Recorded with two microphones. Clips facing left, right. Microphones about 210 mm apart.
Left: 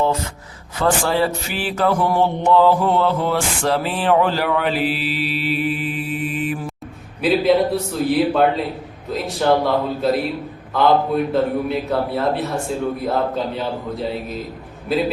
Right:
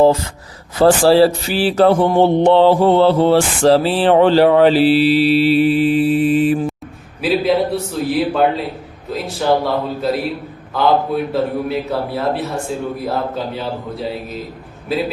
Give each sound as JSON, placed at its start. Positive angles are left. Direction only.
{"t": 0.8, "sound": "mantra", "side_deg": -35}
{"t": 7.2, "sound": "a man's voice", "side_deg": 0}
{"t": 14.9, "sound": "a man's voice", "side_deg": 0}